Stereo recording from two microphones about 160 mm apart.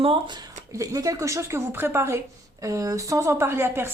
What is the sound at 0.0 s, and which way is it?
Speech, 30° right (ahead or behind).